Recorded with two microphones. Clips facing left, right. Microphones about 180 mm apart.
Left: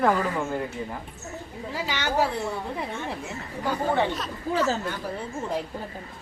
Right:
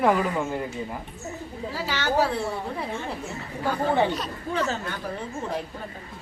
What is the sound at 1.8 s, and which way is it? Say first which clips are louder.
Speech: right 2 dB; 15° left (ahead or behind).